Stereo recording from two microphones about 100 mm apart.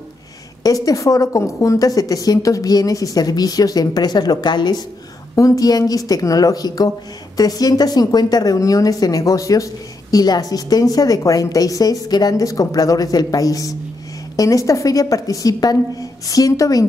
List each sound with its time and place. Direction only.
0.7 s a woman's voice: 35° left (ahead or behind)